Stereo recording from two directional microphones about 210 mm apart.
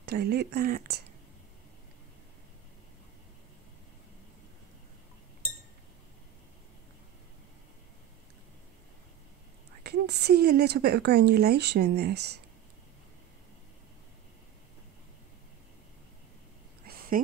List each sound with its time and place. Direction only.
0.0 s speech: 50° right (ahead or behind)
9.8 s speech: 50° right (ahead or behind)